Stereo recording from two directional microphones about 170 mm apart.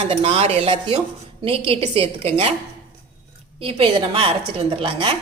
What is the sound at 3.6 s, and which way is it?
Speech, 30° right (ahead or behind).